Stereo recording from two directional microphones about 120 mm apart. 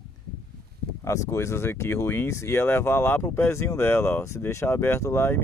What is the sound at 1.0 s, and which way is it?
Speech, 25° left (ahead or behind).